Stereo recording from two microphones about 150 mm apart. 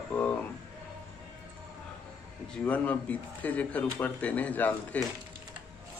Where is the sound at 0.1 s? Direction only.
10° left (ahead or behind).